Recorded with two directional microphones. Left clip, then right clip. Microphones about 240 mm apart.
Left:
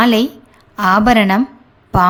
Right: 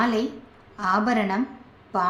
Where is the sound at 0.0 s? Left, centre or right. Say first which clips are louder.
Left 10 dB; left.